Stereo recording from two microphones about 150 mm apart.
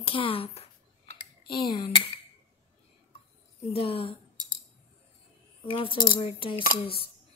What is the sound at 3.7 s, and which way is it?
Speech, 40° left (ahead or behind).